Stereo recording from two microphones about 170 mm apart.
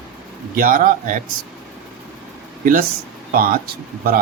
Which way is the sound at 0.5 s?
55° right (ahead or behind).